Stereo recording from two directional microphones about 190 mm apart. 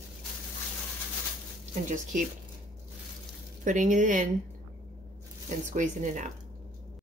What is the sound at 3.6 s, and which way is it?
Speech, 40° right (ahead or behind).